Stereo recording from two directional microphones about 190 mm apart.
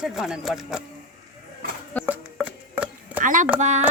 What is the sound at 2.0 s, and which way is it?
Music, 10° right (ahead or behind).